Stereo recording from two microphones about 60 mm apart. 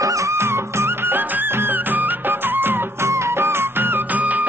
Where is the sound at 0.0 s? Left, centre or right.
Right.